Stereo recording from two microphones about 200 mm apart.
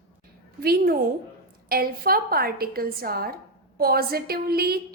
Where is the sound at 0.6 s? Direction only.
50° right (ahead or behind).